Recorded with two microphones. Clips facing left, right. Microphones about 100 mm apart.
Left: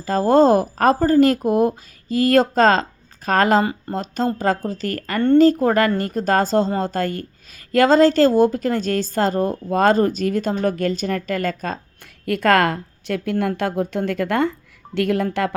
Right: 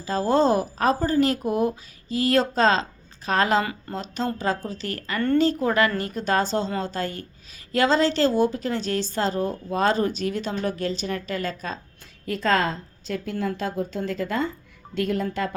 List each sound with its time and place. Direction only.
0.0 s a woman's voice: 45° left (ahead or behind)
3.6 s speech: 30° left (ahead or behind)
3.9 s a woman's voice: 45° left (ahead or behind)
12.2 s a woman's voice: 65° left (ahead or behind)
13.3 s a woman's voice: 60° left (ahead or behind); by 15.5 s 80° left